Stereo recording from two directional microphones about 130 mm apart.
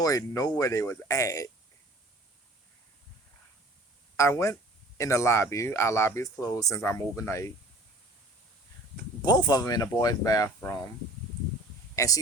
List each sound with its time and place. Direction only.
0.0 s speech: 25° left (ahead or behind)
4.2 s speech: 20° left (ahead or behind)
9.2 s speech: 30° left (ahead or behind)
11.9 s speech: 25° left (ahead or behind)